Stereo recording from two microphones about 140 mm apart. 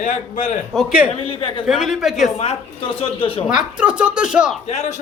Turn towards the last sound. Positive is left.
turn(degrees=50)  # may be behind; listen again after turning